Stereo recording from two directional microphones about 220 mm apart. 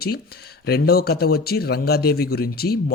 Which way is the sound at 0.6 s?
45° left (ahead or behind).